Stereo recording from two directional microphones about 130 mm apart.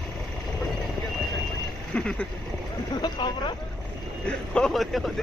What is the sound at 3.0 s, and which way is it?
Speech, 35° left (ahead or behind).